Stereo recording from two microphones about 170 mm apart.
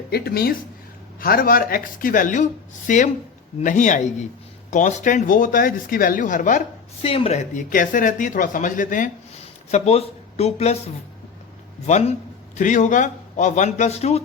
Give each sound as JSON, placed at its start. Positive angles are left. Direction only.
{"t": 0.1, "sound": "speech", "side_deg": 65}
{"t": 7.0, "sound": "speech", "side_deg": 35}
{"t": 9.7, "sound": "speech", "side_deg": 40}